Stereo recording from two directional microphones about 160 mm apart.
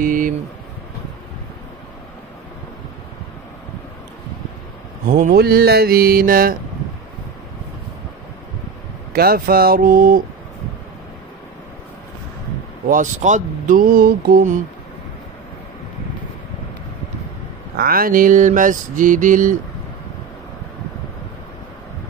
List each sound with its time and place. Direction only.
0.0 s a sound: 55° right (ahead or behind)
5.1 s mantra: 65° right (ahead or behind)
9.1 s mantra: 70° right (ahead or behind)
12.8 s mantra: 55° right (ahead or behind); by 14.4 s 70° right (ahead or behind)
17.7 s mantra: 65° right (ahead or behind)